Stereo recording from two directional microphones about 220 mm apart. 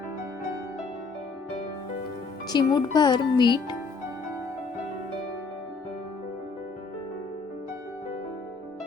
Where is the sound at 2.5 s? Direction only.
20° left (ahead or behind).